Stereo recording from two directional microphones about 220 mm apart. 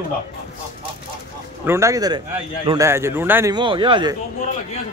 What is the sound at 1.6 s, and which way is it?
Speech, 10° right (ahead or behind).